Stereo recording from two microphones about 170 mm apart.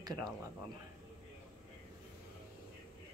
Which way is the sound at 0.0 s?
20° right (ahead or behind).